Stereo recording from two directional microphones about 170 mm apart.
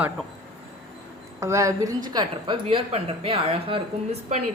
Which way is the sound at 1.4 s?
20° right (ahead or behind).